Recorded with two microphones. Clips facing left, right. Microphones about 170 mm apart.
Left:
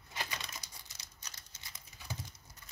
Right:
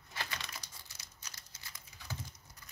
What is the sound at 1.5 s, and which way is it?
Patter, 25° left (ahead or behind).